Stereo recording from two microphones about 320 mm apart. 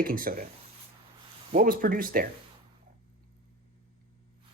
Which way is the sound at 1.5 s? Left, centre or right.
Right.